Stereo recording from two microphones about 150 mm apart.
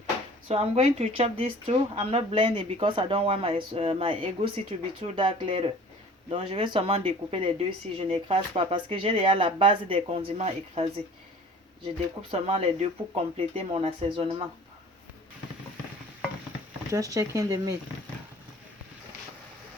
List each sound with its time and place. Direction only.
0.4 s speech: 40° right (ahead or behind)
12.3 s speech: 40° right (ahead or behind)
16.9 s speech: 20° right (ahead or behind)